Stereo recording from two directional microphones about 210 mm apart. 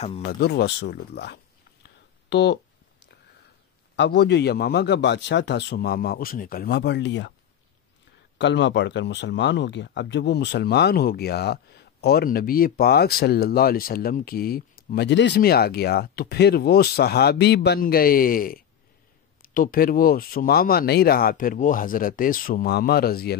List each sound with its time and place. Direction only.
0.3 s speech: 50° left (ahead or behind)
3.9 s speech: 55° left (ahead or behind)
8.4 s speech: 60° left (ahead or behind)